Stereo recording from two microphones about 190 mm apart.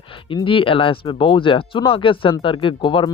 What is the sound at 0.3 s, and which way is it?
Speech, 25° left (ahead or behind).